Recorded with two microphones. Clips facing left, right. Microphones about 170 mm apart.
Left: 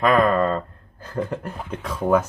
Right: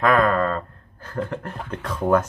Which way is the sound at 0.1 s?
20° left (ahead or behind).